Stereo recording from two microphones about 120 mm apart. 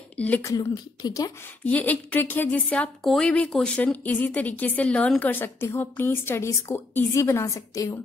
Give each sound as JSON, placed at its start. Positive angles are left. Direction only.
{"t": 0.4, "sound": "speech", "side_deg": 30}
{"t": 1.6, "sound": "a woman's voice", "side_deg": 15}